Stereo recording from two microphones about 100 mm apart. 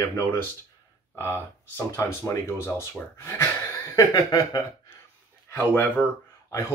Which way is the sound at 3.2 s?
25° left (ahead or behind).